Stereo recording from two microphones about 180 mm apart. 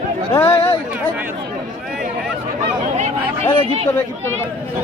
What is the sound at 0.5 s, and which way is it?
Speech, 35° left (ahead or behind).